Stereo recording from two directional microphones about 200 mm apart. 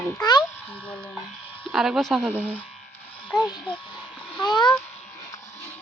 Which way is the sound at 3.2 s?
Centre (ahead or behind).